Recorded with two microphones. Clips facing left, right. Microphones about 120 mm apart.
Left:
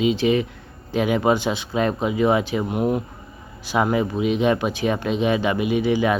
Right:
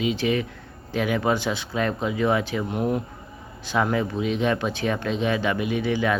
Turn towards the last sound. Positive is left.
turn(degrees=15)  # may be behind; listen again after turning